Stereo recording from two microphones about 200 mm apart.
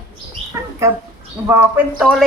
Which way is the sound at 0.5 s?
15° right (ahead or behind).